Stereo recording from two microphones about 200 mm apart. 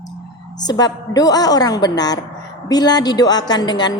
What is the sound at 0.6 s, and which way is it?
A woman's voice, 20° left (ahead or behind).